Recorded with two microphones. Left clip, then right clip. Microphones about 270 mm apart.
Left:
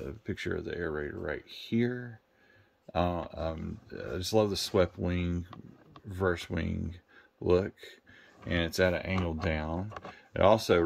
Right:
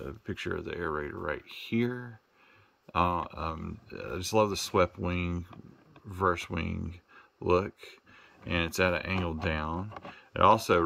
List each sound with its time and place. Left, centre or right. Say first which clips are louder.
0.0 s speech: even; centre